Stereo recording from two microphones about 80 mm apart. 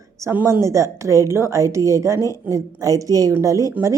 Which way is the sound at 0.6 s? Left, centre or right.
Right.